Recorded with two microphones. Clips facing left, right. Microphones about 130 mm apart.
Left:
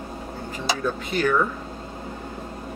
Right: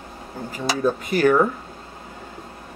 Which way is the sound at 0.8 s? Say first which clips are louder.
Right 6 dB; 45° right (ahead or behind).